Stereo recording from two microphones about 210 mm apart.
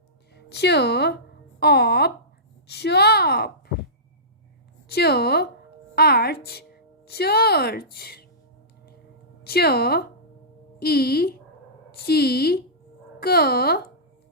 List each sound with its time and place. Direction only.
0.3 s a woman's voice: 55° left (ahead or behind)
4.9 s a woman's voice: 50° left (ahead or behind)
9.4 s a woman's voice: 50° left (ahead or behind)